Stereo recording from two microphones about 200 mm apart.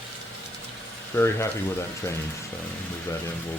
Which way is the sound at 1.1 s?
10° left (ahead or behind).